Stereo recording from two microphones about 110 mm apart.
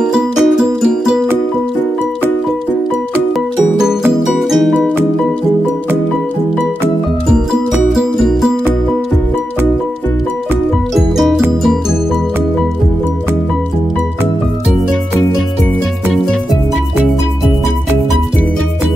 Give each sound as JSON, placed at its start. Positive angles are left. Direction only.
{"t": 0.0, "sound": "music", "side_deg": -10}
{"t": 4.5, "sound": "music", "side_deg": 0}
{"t": 4.7, "sound": "music", "side_deg": -10}
{"t": 7.7, "sound": "music", "side_deg": -5}
{"t": 11.0, "sound": "music", "side_deg": -5}